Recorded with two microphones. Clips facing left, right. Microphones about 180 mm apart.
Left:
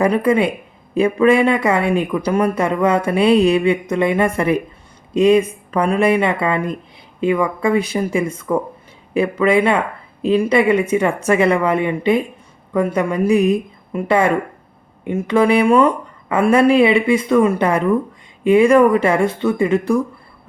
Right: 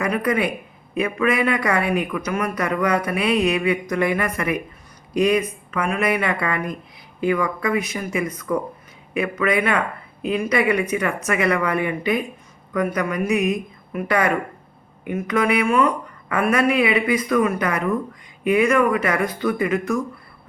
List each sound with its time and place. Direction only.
0.0 s speech: 30° left (ahead or behind)